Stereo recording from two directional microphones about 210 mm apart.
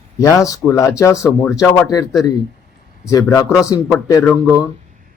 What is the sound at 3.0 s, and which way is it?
Speech, 15° left (ahead or behind).